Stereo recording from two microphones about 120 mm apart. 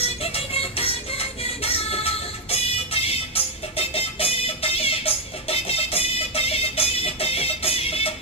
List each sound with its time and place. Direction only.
0.0 s music: 55° left (ahead or behind)